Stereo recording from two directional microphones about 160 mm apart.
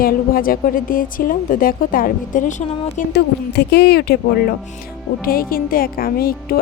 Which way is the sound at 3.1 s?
90° left.